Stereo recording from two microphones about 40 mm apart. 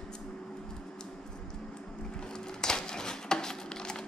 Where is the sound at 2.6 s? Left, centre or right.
Centre.